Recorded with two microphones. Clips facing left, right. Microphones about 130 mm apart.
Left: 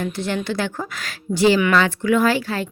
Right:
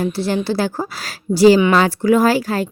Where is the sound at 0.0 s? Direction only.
35° right (ahead or behind).